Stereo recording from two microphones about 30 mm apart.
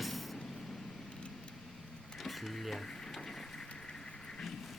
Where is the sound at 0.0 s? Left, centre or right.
Centre.